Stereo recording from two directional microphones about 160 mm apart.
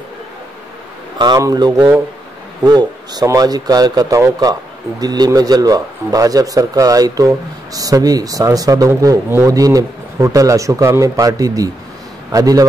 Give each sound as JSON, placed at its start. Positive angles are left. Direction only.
{"t": 1.1, "sound": "speech", "side_deg": -25}